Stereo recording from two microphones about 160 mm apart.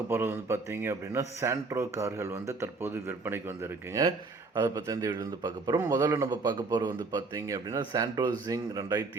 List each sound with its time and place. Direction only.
0.1 s a man's voice: 15° right (ahead or behind)